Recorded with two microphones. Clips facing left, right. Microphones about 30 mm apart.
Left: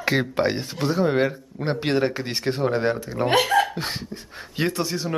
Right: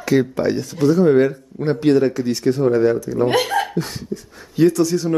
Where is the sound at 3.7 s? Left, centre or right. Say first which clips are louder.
Right 5 dB; left.